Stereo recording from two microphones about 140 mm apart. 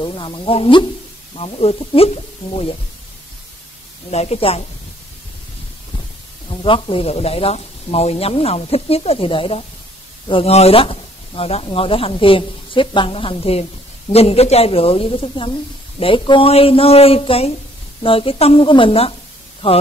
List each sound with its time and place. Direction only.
0.0 s speech: 35° left (ahead or behind)
4.1 s speech: 50° left (ahead or behind)
6.6 s speech: 40° left (ahead or behind)